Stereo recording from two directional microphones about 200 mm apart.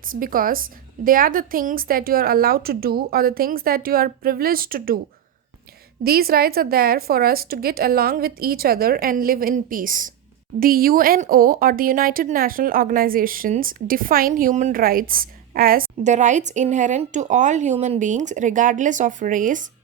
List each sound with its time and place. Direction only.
0.0 s speech: 45° right (ahead or behind)
6.0 s speech: 50° right (ahead or behind)